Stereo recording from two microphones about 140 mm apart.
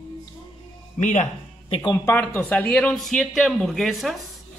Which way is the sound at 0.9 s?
60° left (ahead or behind).